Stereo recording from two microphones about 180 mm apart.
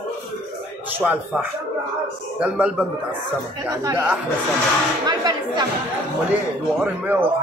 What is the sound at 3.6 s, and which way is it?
Speech, 15° right (ahead or behind).